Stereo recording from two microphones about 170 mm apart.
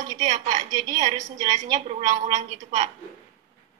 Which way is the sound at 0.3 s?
45° right (ahead or behind).